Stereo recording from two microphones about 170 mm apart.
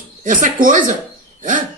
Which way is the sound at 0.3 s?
50° right (ahead or behind).